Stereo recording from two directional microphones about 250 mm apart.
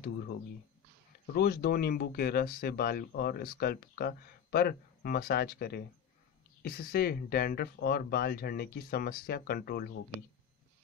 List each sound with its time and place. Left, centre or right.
1.2 s speech: left